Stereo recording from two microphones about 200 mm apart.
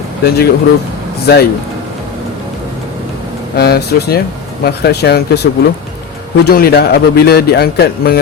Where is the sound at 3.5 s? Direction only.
55° left (ahead or behind).